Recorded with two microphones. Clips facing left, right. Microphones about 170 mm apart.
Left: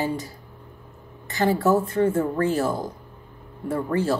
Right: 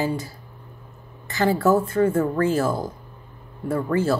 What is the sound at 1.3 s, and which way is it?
A woman's voice, 20° left (ahead or behind).